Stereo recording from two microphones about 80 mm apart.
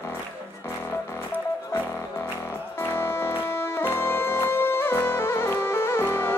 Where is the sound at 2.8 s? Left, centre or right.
Left.